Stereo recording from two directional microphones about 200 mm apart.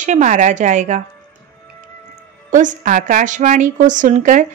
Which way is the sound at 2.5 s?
40° right (ahead or behind).